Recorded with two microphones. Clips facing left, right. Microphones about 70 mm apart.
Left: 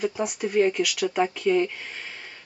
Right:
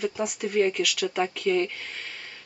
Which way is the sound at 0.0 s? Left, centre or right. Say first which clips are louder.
Left 2 dB; centre.